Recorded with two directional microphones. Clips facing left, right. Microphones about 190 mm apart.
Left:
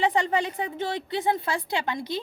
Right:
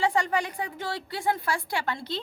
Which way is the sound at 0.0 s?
20° left (ahead or behind).